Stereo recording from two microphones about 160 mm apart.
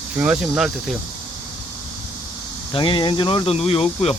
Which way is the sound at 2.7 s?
30° left (ahead or behind).